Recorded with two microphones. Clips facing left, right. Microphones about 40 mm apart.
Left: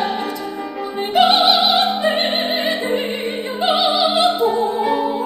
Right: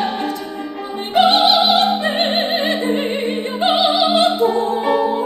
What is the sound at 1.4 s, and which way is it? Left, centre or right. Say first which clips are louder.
Opera: right 1 dB; left.